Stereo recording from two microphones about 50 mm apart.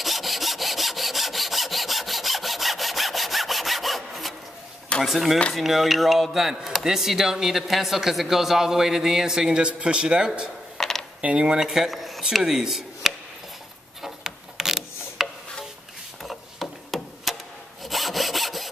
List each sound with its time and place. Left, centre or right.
0.0 s sawing: centre
5.0 s speech: centre
10.8 s mechanisms: centre
11.1 s speech: right
11.6 s speech: centre
14.0 s rub: centre
16.2 s a sound: centre
17.8 s sawing: centre